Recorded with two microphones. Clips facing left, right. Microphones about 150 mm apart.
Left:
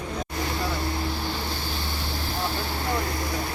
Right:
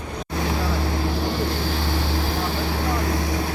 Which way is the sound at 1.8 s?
90° right.